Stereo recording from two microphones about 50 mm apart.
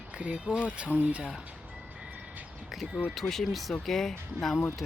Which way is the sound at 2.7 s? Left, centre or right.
Centre.